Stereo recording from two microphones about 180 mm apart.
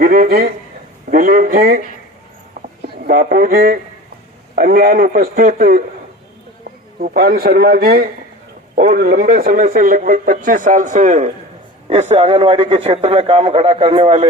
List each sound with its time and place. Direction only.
0.0 s a man's voice: 55° right (ahead or behind)
2.6 s a sound: 50° right (ahead or behind)
4.5 s a man's voice: 55° right (ahead or behind); by 14.3 s 35° right (ahead or behind)